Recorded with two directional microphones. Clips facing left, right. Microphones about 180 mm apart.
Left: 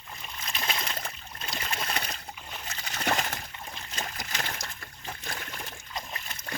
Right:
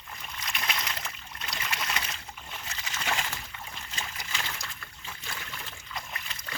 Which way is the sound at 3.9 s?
40° left (ahead or behind).